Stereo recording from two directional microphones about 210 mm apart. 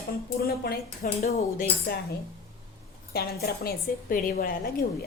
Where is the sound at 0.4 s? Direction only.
45° left (ahead or behind).